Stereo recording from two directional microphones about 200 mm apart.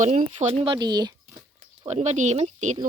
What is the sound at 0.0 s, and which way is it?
Speech, 30° right (ahead or behind).